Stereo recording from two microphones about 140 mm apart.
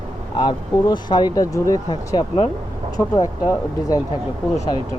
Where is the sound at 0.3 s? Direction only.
30° left (ahead or behind).